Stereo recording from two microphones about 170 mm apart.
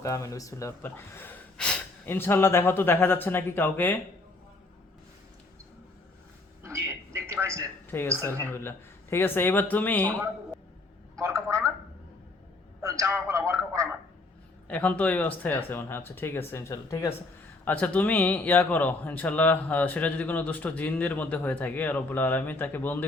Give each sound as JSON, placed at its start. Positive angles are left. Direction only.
{"t": 0.0, "sound": "a man's voice", "side_deg": 20}
{"t": 6.6, "sound": "a sound", "side_deg": -15}
{"t": 7.9, "sound": "a woman's voice", "side_deg": 15}
{"t": 11.2, "sound": "a man's voice", "side_deg": -15}
{"t": 12.8, "sound": "a man's voice", "side_deg": -15}
{"t": 14.7, "sound": "a man's voice", "side_deg": 10}